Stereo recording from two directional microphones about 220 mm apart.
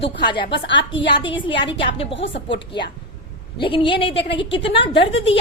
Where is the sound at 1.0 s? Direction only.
55° left (ahead or behind).